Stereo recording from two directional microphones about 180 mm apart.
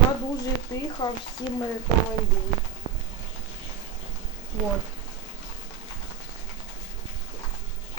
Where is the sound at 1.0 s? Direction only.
25° left (ahead or behind).